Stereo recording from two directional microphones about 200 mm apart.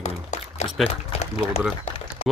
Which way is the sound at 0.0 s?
35° left (ahead or behind).